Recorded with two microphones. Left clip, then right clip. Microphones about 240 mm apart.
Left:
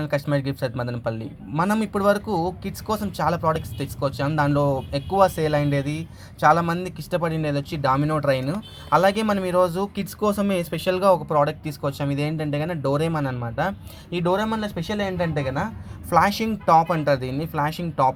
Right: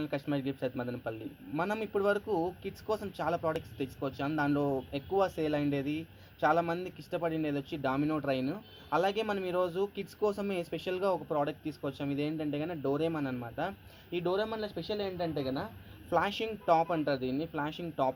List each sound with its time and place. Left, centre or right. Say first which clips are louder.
0.0 s speech: left 10 dB; left